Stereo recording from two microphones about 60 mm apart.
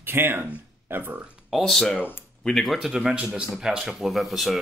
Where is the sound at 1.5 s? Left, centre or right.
Centre.